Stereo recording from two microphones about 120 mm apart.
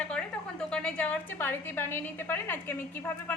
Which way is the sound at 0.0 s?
10° left (ahead or behind).